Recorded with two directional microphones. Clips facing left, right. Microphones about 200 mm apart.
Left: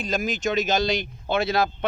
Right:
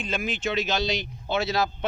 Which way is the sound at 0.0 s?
40° left (ahead or behind).